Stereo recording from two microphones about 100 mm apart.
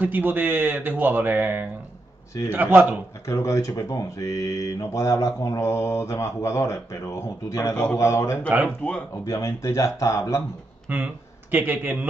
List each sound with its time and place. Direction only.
0.0 s speech: 20° right (ahead or behind)
3.3 s speech: 30° left (ahead or behind)
7.7 s speech: 15° left (ahead or behind)
8.0 s speech: 30° left (ahead or behind)
8.6 s speech: 10° left (ahead or behind)
9.1 s speech: 30° left (ahead or behind)
10.9 s a man's voice: 15° right (ahead or behind)